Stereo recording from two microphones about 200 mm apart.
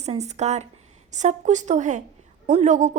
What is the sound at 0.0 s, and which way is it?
A woman's voice, 35° right (ahead or behind).